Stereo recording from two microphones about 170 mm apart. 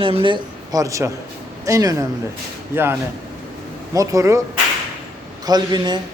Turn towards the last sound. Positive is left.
turn(degrees=-25)  # may be behind; listen again after turning